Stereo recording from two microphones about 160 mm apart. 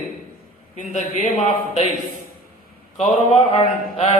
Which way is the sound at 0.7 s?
50° left (ahead or behind).